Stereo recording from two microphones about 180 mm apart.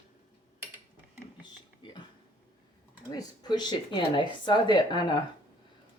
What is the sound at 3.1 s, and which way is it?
Speech, 25° left (ahead or behind).